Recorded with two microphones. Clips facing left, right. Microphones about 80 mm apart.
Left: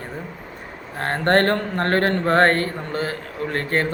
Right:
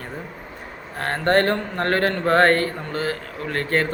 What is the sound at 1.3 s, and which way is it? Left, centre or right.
A man's voice, left.